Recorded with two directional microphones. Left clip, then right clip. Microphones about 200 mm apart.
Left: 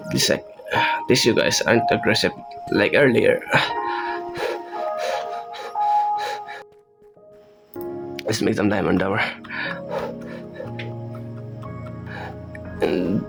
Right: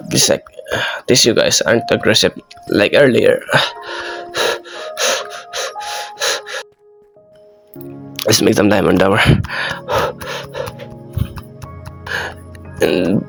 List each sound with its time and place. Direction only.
0.1 s speech: 25° right (ahead or behind)
2.7 s music: 25° right (ahead or behind)
8.1 s speech: 40° right (ahead or behind)
9.4 s a sound: 40° right (ahead or behind)
12.0 s music: 35° right (ahead or behind)
12.8 s speech: 25° right (ahead or behind)